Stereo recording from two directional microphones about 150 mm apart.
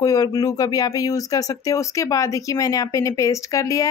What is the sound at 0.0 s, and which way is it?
Speech, 25° left (ahead or behind).